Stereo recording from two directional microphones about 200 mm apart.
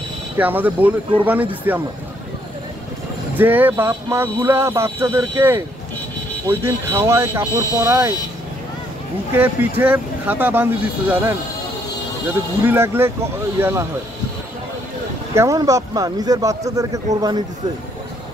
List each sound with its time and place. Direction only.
0.4 s speech: 10° right (ahead or behind)
3.3 s speech: 10° right (ahead or behind)
6.6 s speech: 15° right (ahead or behind)
9.3 s speech: 10° right (ahead or behind)
12.6 s speech: 10° right (ahead or behind)
15.3 s speech: 15° right (ahead or behind)